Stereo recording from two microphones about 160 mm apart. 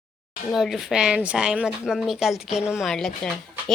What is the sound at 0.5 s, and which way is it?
Speech, centre (ahead or behind).